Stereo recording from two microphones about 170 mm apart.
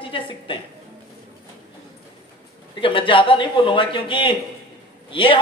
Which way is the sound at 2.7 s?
30° left (ahead or behind).